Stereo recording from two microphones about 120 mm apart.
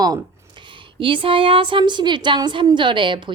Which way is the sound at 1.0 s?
45° right (ahead or behind).